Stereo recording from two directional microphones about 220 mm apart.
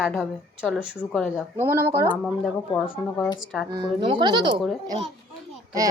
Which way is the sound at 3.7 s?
20° right (ahead or behind).